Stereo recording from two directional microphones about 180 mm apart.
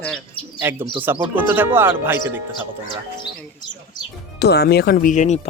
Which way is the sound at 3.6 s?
25° left (ahead or behind).